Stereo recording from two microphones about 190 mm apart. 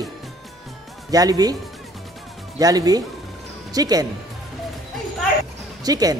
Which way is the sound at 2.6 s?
20° right (ahead or behind).